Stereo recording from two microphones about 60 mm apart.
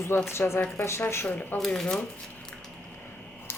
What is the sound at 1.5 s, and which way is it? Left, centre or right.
Speech, centre.